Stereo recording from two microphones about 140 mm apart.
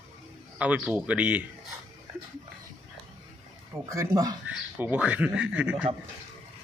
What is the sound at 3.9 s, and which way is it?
Speech, 25° right (ahead or behind).